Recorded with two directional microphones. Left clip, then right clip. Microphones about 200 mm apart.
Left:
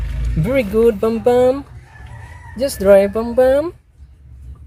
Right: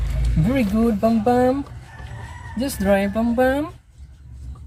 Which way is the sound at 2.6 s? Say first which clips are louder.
Left 9 dB; 65° left (ahead or behind).